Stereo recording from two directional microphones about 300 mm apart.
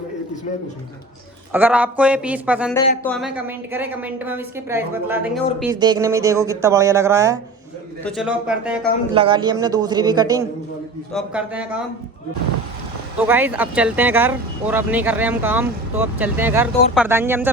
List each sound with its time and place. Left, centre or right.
1.5 s a woman's voice: centre
5.7 s a woman's voice: centre
9.1 s a woman's voice: centre
13.1 s speech: centre